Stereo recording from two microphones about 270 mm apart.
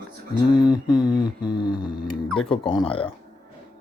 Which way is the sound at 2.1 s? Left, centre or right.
Centre.